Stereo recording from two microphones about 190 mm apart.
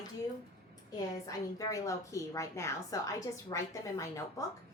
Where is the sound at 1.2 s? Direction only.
20° left (ahead or behind).